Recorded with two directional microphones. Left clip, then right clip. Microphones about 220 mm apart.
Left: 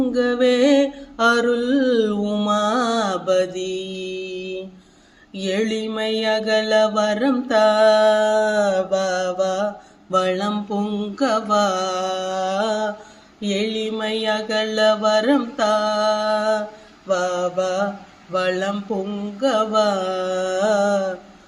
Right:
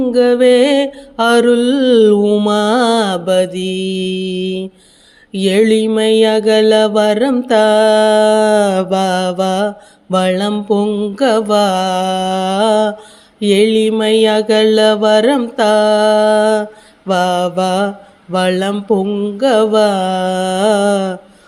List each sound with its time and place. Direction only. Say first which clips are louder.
0.1 s mantra: right 11 dB; 40° right (ahead or behind)
5.3 s a sound: right 11 dB; 45° right (ahead or behind)
13.4 s mantra: right 12 dB; 45° right (ahead or behind)